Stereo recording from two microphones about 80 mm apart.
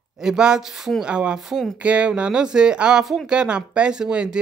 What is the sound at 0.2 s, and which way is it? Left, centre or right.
Speech, centre.